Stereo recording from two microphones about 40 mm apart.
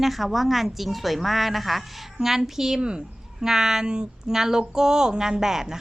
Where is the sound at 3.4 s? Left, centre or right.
Centre.